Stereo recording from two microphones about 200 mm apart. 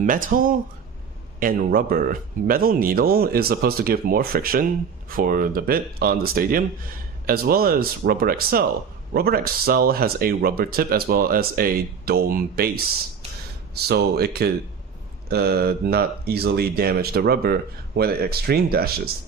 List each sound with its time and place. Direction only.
0.0 s speech: 40° right (ahead or behind)
13.8 s speech: 55° right (ahead or behind)